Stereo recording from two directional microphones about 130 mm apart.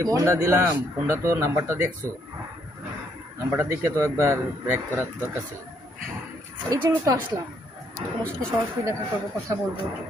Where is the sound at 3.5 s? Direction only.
20° right (ahead or behind).